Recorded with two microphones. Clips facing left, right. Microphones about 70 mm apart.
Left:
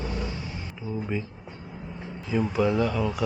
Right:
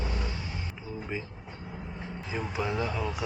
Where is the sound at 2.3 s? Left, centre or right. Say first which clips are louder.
Left 8 dB; centre.